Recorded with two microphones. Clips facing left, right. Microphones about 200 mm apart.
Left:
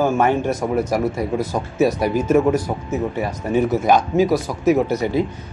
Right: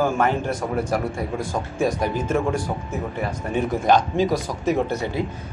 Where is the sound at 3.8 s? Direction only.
10° left (ahead or behind).